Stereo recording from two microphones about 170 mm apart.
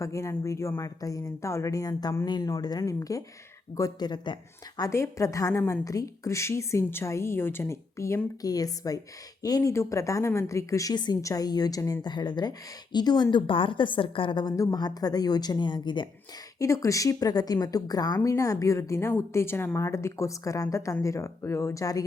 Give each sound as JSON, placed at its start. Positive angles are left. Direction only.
{"t": 0.0, "sound": "a woman's voice", "side_deg": 15}